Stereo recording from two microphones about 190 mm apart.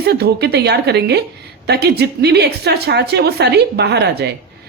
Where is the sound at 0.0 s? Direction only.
55° right (ahead or behind).